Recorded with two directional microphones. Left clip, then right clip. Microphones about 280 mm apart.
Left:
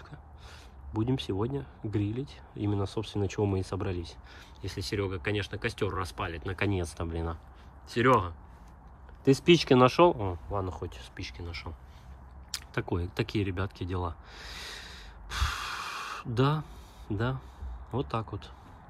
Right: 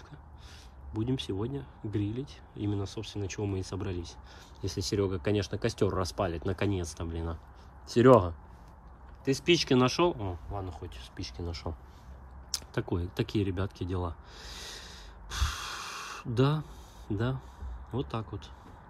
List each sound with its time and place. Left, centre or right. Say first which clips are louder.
0.1 s speech: left 2 dB; centre
9.2 s speech: left 4 dB; centre
11.1 s speech: right 1 dB; centre
12.4 s a sound: even; centre
17.1 s speech: left 1 dB; centre